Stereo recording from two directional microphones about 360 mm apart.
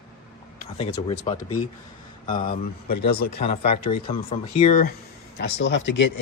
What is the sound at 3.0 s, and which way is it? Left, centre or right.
Speech, left.